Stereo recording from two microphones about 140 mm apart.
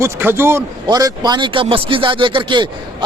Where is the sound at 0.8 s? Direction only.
30° right (ahead or behind).